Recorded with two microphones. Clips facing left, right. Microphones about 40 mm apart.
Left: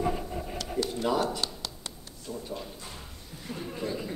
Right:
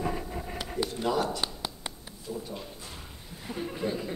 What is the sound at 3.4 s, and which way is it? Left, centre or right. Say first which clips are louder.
Speech: right 2 dB; centre.